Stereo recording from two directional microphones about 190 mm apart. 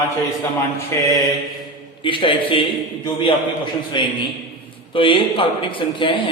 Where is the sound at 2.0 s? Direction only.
25° left (ahead or behind).